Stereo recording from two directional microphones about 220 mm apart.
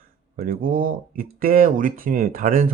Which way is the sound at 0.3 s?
40° right (ahead or behind).